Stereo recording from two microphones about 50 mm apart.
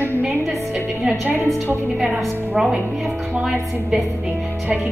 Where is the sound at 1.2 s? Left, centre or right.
Right.